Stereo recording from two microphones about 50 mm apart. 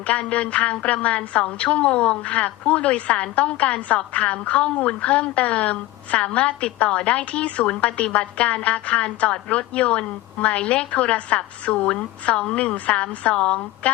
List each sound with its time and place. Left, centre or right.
0.1 s a woman's voice: left